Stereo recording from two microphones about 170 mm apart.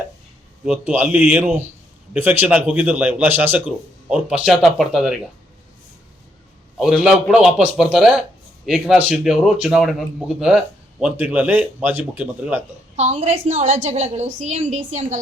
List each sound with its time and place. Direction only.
0.6 s a man's voice: 10° right (ahead or behind)
6.7 s a man's voice: centre (ahead or behind)
12.5 s a woman's voice: 40° right (ahead or behind)